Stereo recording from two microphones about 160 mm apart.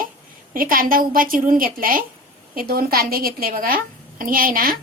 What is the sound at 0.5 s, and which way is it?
A woman's voice, 60° right (ahead or behind).